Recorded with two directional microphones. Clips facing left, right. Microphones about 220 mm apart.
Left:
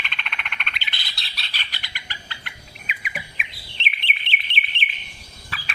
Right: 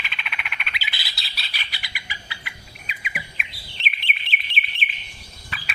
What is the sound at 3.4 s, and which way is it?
Chirp, centre (ahead or behind).